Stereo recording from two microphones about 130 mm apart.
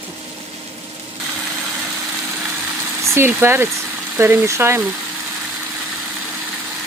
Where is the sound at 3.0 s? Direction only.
20° right (ahead or behind).